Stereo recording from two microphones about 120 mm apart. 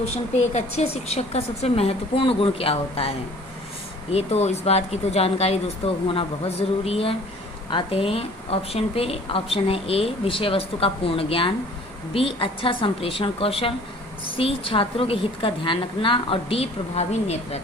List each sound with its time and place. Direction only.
0.5 s a woman's voice: 65° left (ahead or behind)